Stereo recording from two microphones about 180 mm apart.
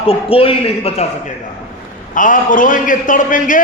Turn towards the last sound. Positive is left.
turn(degrees=45)  # may be behind; listen again after turning